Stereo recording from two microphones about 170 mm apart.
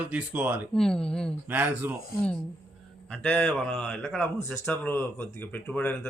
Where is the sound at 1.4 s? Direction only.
10° right (ahead or behind).